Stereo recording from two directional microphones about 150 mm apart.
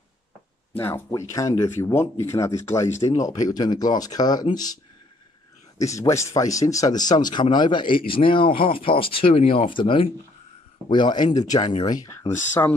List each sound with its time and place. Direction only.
0.7 s speech: 15° left (ahead or behind)
5.8 s speech: 20° left (ahead or behind)